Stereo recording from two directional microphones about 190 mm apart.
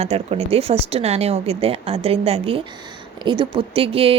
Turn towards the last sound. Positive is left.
turn(degrees=-30)  # may be behind; listen again after turning